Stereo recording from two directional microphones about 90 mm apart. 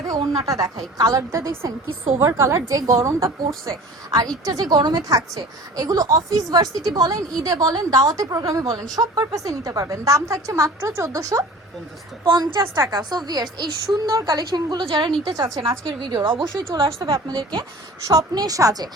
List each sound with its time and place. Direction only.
0.3 s a woman's voice: 40° right (ahead or behind)
3.7 s a woman's voice: 40° right (ahead or behind)
15.2 s a woman's voice: 45° right (ahead or behind)
15.6 s a woman's voice: 65° right (ahead or behind)
18.1 s a woman's voice: 40° right (ahead or behind)